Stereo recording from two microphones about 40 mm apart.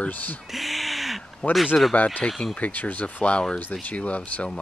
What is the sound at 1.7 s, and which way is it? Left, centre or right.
Speech, left.